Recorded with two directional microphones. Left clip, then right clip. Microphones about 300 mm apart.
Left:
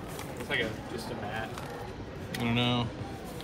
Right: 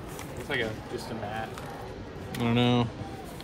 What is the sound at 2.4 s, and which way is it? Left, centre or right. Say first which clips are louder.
Speech: right 4 dB; centre.